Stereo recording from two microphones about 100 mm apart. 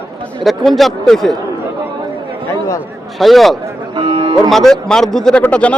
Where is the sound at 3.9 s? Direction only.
55° right (ahead or behind).